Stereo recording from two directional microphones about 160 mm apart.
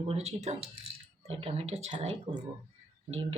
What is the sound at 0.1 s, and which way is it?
Speech, 45° right (ahead or behind).